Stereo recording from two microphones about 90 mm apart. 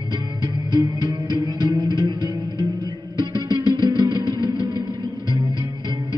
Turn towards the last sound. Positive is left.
turn(degrees=-55)  # may be behind; listen again after turning